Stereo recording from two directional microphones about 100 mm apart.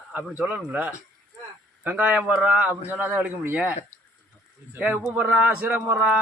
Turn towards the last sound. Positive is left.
turn(degrees=-10)  # may be behind; listen again after turning